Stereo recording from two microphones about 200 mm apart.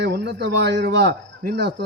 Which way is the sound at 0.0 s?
55° right (ahead or behind).